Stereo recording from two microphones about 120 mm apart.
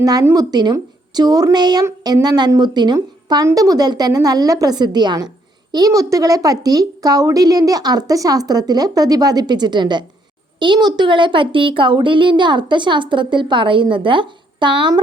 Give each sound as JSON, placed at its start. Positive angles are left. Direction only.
{"t": 0.0, "sound": "speech", "side_deg": -30}